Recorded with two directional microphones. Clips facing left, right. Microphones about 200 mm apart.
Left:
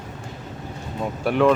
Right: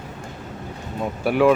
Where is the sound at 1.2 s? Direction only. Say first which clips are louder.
Right 1 dB; 5° right (ahead or behind).